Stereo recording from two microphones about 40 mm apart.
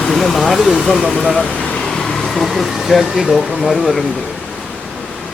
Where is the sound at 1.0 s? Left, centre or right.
Left.